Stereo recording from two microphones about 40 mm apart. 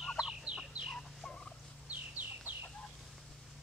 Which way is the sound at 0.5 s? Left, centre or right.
Right.